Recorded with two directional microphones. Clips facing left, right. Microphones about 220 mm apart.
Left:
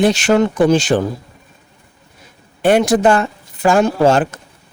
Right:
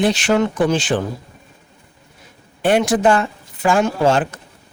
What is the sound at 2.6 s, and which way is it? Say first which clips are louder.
Speech: left 3 dB; 40° left (ahead or behind).